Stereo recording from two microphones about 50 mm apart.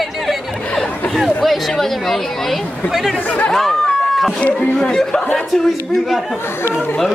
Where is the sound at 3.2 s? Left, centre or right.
Left.